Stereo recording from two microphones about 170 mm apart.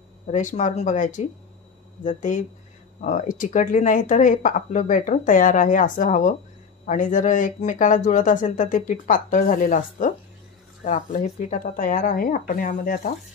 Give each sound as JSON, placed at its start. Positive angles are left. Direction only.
{"t": 0.3, "sound": "speech", "side_deg": 45}